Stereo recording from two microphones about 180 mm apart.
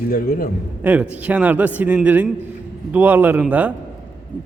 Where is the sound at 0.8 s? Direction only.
10° right (ahead or behind).